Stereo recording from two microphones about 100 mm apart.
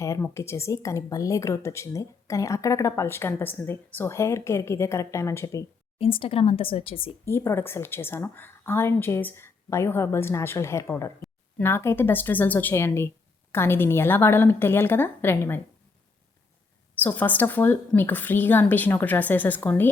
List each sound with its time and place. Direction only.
0.0 s speech: 30° left (ahead or behind)
6.0 s speech: 70° left (ahead or behind)
7.3 s speech: 25° left (ahead or behind)
17.0 s speech: 15° left (ahead or behind)